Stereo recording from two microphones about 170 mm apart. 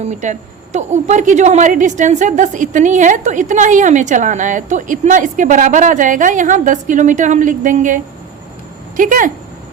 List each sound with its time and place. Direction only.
0.1 s a woman's voice: 45° right (ahead or behind)